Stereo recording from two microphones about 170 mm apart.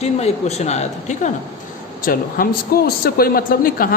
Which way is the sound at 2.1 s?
60° left (ahead or behind).